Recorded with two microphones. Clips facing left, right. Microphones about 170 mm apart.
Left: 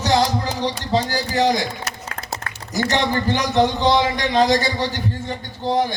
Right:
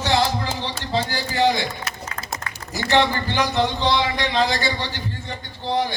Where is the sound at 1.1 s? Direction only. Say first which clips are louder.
Left 2 dB; 40° left (ahead or behind).